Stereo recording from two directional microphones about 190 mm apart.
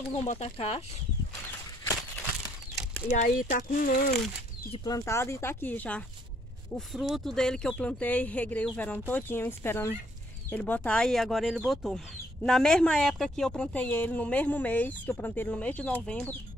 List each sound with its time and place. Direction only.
0.2 s speech: 35° left (ahead or behind)
3.1 s speech: 45° left (ahead or behind)
4.7 s a woman's voice: 20° left (ahead or behind)